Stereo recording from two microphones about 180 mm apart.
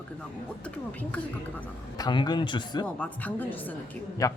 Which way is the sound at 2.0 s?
25° left (ahead or behind).